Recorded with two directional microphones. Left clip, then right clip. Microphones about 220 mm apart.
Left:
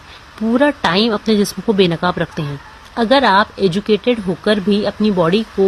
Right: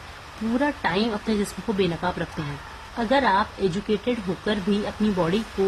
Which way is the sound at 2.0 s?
30° left (ahead or behind).